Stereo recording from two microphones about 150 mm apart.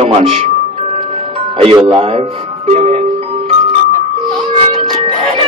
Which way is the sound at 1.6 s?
35° right (ahead or behind).